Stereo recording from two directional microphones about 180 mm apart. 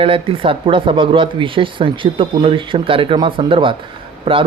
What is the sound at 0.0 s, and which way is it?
Speech, 30° right (ahead or behind).